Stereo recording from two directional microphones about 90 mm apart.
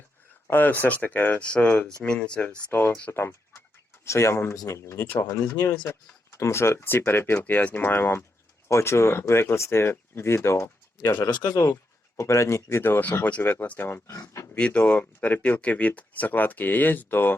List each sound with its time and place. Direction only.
0.4 s speech: 20° left (ahead or behind)
14.1 s speech: 35° left (ahead or behind)
14.5 s speech: 10° left (ahead or behind)